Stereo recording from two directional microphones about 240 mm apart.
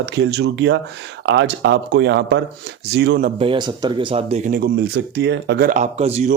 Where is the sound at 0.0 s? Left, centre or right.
Right.